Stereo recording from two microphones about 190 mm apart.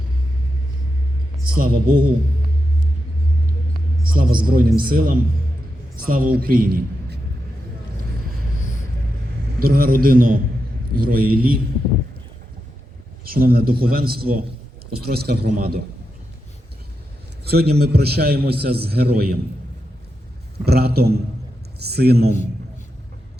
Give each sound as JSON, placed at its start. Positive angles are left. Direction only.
{"t": 1.5, "sound": "a man's voice", "side_deg": -50}
{"t": 4.0, "sound": "a man's voice", "side_deg": -50}
{"t": 9.6, "sound": "a man's voice", "side_deg": -50}
{"t": 13.2, "sound": "a man's voice", "side_deg": -50}
{"t": 17.4, "sound": "a man's voice", "side_deg": -55}
{"t": 20.7, "sound": "a man's voice", "side_deg": -55}